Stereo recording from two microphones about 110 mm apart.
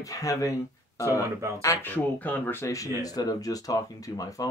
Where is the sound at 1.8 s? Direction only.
15° left (ahead or behind).